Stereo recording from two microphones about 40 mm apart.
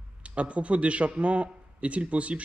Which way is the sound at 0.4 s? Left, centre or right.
Right.